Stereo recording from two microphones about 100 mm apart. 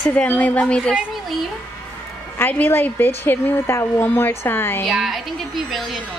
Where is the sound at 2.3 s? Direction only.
20° left (ahead or behind).